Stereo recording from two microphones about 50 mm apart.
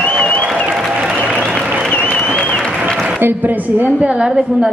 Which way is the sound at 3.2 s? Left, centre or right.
Right.